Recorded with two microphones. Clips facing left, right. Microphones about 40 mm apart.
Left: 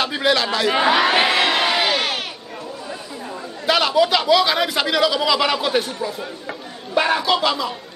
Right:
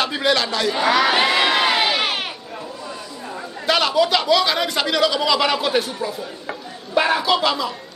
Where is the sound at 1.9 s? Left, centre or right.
Centre.